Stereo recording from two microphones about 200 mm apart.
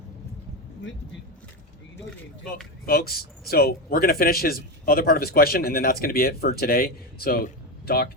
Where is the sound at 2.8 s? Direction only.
50° left (ahead or behind).